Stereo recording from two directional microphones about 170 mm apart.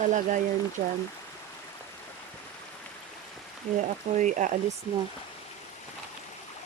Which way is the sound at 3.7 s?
45° right (ahead or behind).